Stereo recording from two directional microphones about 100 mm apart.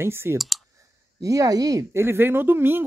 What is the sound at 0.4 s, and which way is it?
Clicking, centre (ahead or behind).